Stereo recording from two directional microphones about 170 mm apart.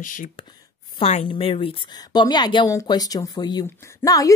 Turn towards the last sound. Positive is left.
turn(degrees=20)  # may be behind; listen again after turning